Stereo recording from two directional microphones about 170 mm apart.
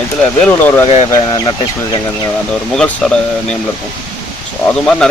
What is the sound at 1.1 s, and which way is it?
Speech, 25° left (ahead or behind).